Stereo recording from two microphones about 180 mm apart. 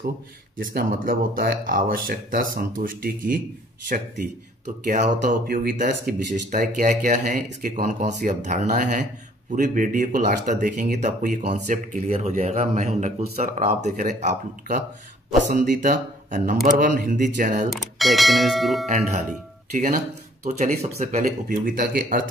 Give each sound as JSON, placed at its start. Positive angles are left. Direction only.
{"t": 0.6, "sound": "speech", "side_deg": -50}
{"t": 4.8, "sound": "speech", "side_deg": -45}
{"t": 17.9, "sound": "speech", "side_deg": 0}
{"t": 18.9, "sound": "speech", "side_deg": -45}
{"t": 20.4, "sound": "speech", "side_deg": -40}